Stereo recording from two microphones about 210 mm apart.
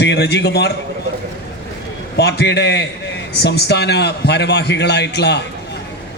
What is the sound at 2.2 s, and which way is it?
A man's voice, 50° left (ahead or behind).